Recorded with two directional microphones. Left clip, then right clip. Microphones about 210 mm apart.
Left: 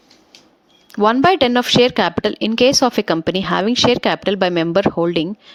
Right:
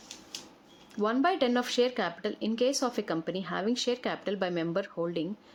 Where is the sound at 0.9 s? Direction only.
40° left (ahead or behind).